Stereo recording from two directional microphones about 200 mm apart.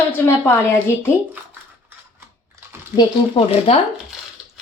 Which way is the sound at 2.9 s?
25° left (ahead or behind).